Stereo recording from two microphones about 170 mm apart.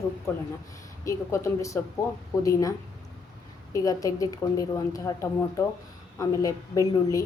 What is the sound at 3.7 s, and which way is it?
A woman's voice, 20° left (ahead or behind).